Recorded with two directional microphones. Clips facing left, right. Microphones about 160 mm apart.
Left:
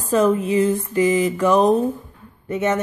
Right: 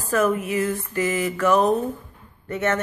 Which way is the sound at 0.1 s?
20° left (ahead or behind).